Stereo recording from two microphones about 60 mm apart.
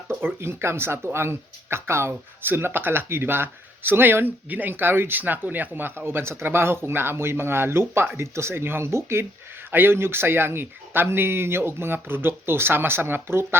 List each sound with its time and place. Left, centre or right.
0.1 s speech: right
6.1 s speech: right